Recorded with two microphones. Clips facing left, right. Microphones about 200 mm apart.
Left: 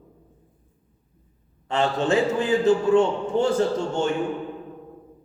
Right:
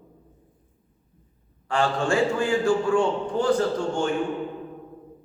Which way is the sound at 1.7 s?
20° left (ahead or behind).